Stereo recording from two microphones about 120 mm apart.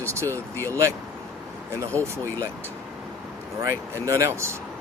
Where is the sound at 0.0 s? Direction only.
25° right (ahead or behind).